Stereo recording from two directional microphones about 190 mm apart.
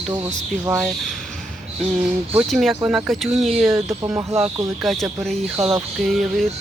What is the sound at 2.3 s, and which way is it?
Speech, centre (ahead or behind).